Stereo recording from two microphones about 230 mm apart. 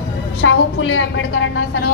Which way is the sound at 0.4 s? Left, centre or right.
Left.